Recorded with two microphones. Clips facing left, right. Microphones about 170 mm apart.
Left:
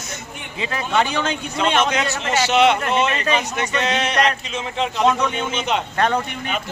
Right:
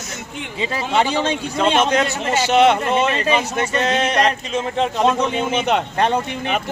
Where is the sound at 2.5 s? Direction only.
50° right (ahead or behind).